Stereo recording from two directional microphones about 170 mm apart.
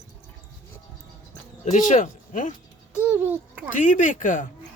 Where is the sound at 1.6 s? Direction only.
45° left (ahead or behind).